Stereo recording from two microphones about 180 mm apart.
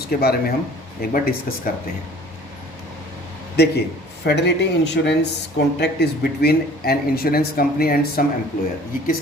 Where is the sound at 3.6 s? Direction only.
65° left (ahead or behind).